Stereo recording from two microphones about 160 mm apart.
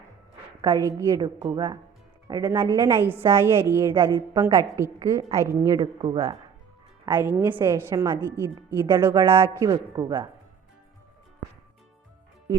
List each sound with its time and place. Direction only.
0.6 s a woman's voice: 20° right (ahead or behind)